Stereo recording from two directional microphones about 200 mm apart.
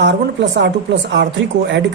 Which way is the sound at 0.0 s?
60° right (ahead or behind).